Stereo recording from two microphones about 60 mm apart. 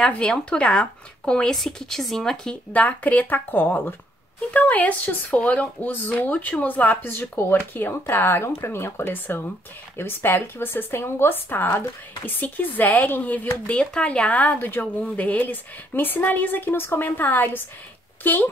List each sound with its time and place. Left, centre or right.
0.0 s speech: centre
2.7 s speech: left